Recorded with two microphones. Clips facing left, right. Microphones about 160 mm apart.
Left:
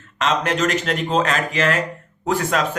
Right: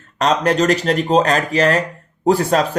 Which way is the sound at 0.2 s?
40° right (ahead or behind).